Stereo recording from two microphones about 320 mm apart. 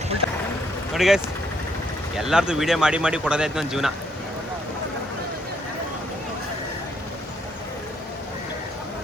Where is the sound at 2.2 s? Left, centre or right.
Centre.